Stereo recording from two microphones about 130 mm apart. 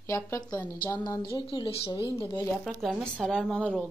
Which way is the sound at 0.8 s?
30° left (ahead or behind).